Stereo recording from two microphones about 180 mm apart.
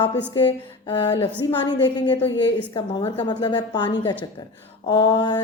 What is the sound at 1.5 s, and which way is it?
Speech, 25° left (ahead or behind).